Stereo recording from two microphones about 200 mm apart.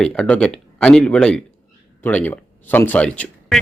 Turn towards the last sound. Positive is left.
turn(degrees=5)  # may be behind; listen again after turning